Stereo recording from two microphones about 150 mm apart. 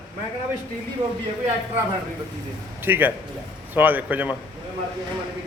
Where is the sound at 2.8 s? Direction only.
15° right (ahead or behind).